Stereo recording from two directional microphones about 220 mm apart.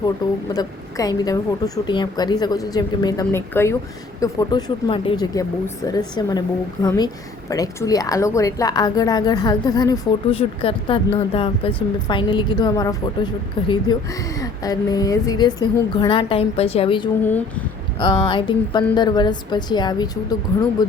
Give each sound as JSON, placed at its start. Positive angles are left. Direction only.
{"t": 0.5, "sound": "a woman's voice", "side_deg": 15}